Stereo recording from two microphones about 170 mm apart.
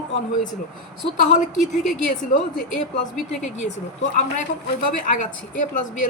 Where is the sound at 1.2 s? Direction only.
50° left (ahead or behind).